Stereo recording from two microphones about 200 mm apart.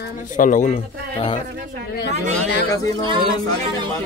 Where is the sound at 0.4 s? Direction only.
40° left (ahead or behind).